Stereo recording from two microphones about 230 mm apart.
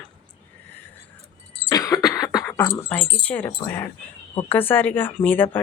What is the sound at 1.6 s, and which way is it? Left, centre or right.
Cough, centre.